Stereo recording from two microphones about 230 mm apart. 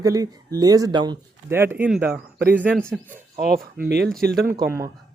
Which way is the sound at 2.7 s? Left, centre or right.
Centre.